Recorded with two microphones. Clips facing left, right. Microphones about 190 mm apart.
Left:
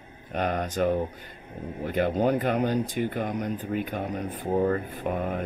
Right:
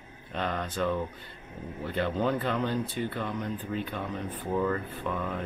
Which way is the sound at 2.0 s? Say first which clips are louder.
Left 5 dB; 45° left (ahead or behind).